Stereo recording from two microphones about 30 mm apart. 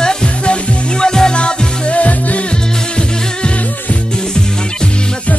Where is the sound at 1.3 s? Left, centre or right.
Left.